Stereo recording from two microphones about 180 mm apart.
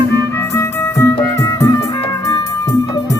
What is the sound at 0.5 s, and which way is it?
Music, 15° left (ahead or behind).